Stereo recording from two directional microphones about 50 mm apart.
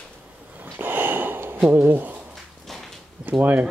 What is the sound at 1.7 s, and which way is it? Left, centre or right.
Speech, right.